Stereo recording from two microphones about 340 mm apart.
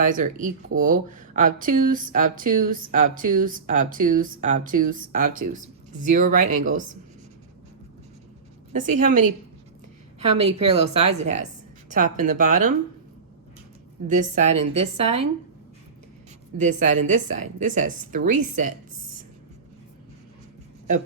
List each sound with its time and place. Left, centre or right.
0.0 s speech: right
8.7 s speech: right
14.1 s speech: right
16.6 s speech: right